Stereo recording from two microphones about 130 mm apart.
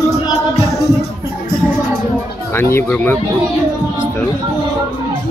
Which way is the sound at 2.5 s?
15° left (ahead or behind).